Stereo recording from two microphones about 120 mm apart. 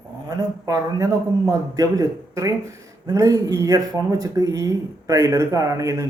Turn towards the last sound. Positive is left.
turn(degrees=-25)  # may be behind; listen again after turning